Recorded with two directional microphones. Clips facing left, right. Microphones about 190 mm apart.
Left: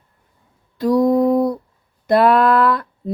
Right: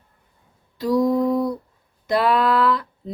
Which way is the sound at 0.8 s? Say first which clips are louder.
Left 4 dB; 50° left (ahead or behind).